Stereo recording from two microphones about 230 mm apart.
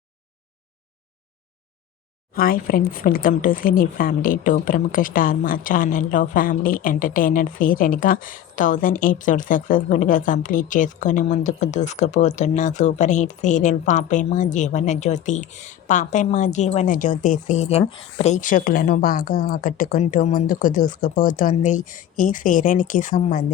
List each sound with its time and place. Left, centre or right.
2.3 s speech: left